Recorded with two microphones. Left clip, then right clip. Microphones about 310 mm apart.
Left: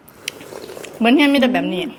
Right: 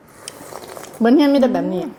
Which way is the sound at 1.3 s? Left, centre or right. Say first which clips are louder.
Even; centre.